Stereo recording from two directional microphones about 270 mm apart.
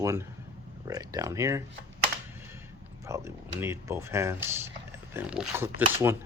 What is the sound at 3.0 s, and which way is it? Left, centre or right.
Speech, centre.